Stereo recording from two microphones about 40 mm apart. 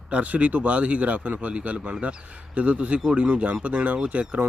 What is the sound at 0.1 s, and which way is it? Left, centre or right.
Speech, right.